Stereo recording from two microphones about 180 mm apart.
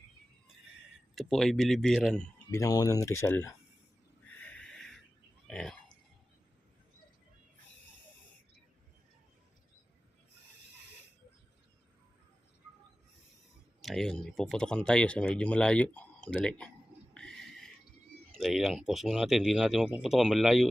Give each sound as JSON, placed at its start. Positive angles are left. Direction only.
{"t": 1.1, "sound": "speech", "side_deg": 0}
{"t": 2.5, "sound": "speech", "side_deg": 20}
{"t": 4.4, "sound": "a sound", "side_deg": 5}
{"t": 13.8, "sound": "speech", "side_deg": 0}
{"t": 17.2, "sound": "a sound", "side_deg": 5}
{"t": 18.3, "sound": "speech", "side_deg": 0}